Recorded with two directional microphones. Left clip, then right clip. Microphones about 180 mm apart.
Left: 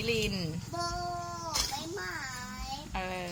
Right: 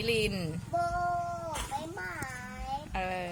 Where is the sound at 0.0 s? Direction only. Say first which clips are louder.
Right 2 dB; 10° right (ahead or behind).